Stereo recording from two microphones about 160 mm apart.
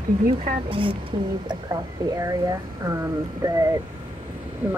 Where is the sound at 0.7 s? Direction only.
35° right (ahead or behind).